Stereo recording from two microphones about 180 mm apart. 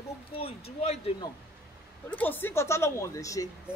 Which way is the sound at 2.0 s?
10° left (ahead or behind).